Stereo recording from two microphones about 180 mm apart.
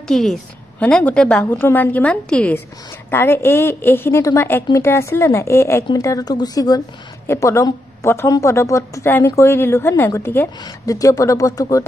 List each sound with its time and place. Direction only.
0.1 s a woman's voice: centre (ahead or behind); by 11.8 s 20° left (ahead or behind)